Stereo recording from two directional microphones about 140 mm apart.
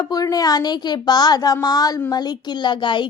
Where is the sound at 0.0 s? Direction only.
25° left (ahead or behind).